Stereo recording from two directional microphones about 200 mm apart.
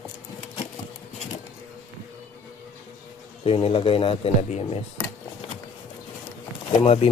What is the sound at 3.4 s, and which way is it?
Speech, 30° left (ahead or behind).